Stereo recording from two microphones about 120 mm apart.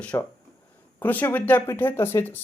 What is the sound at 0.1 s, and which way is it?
Speech, 25° left (ahead or behind).